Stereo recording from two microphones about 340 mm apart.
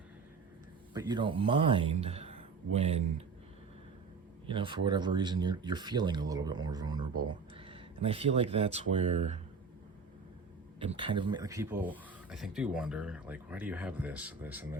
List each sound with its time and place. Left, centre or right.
0.9 s speech: centre
4.4 s speech: centre
10.8 s speech: centre